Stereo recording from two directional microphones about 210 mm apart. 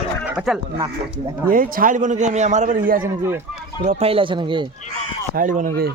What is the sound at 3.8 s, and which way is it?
Speech, 30° right (ahead or behind).